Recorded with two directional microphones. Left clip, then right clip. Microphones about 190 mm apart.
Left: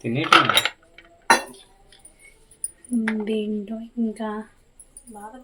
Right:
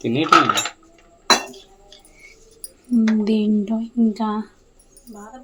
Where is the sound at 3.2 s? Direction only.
40° right (ahead or behind).